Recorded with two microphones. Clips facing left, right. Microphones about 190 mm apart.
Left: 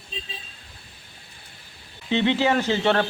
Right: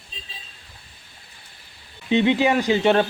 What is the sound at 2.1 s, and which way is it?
Speech, 15° right (ahead or behind).